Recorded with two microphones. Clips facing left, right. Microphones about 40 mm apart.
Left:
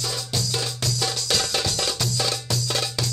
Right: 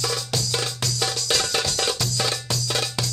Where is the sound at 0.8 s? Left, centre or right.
Centre.